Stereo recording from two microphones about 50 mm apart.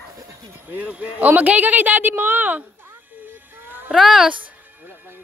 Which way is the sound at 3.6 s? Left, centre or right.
Right.